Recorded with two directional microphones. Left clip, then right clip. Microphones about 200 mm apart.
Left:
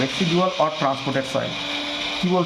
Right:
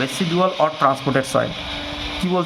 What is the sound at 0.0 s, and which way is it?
Speech, 50° right (ahead or behind).